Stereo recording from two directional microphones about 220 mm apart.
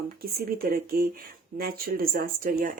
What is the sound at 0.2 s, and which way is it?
Speech, 45° right (ahead or behind).